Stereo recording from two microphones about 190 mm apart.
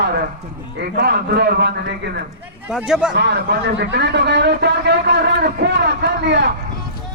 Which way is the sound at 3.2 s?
60° right (ahead or behind).